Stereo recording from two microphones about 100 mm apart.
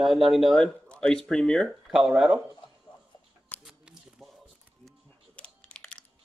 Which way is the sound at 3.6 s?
10° right (ahead or behind).